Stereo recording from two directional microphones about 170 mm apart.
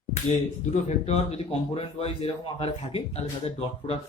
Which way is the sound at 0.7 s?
40° left (ahead or behind).